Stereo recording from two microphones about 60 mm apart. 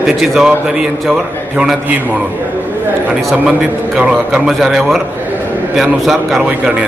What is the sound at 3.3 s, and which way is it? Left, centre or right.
A man's voice, centre.